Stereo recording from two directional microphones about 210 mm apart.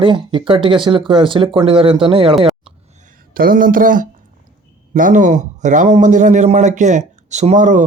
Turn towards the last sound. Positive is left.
turn(degrees=-35)  # may be behind; listen again after turning